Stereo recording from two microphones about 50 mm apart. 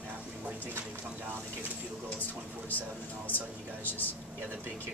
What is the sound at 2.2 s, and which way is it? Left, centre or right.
Speech, left.